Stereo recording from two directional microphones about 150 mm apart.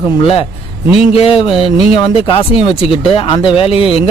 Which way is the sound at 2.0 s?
35° left (ahead or behind).